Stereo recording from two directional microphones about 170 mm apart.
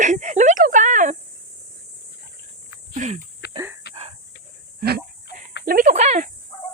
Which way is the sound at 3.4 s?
70° left (ahead or behind).